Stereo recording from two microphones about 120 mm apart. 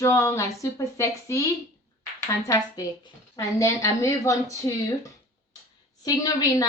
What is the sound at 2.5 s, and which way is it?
A woman's voice, 30° left (ahead or behind).